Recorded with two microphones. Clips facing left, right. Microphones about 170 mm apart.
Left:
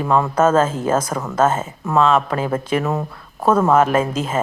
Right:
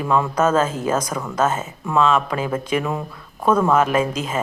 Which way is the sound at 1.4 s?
30° left (ahead or behind).